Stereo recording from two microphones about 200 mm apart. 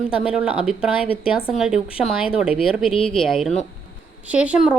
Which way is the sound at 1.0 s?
30° left (ahead or behind).